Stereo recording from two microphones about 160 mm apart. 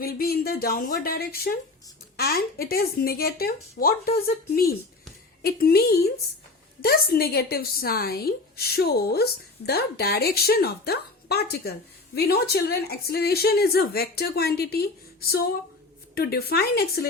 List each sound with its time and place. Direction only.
0.0 s speech: 70° left (ahead or behind)
6.8 s a woman's voice: 70° left (ahead or behind)